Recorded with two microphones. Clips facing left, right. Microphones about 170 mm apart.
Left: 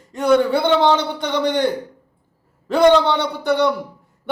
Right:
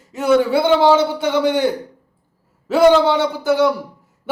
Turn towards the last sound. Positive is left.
turn(degrees=-5)  # may be behind; listen again after turning